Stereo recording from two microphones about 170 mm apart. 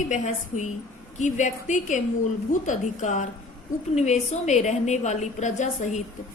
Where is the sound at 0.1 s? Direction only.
45° left (ahead or behind).